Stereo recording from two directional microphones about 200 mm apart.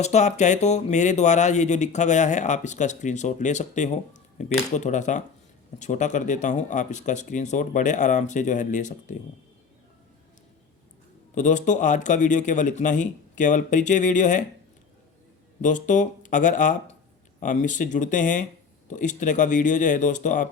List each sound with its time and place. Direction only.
0.0 s speech: 35° left (ahead or behind)
11.3 s speech: 40° left (ahead or behind)
15.6 s speech: 40° left (ahead or behind)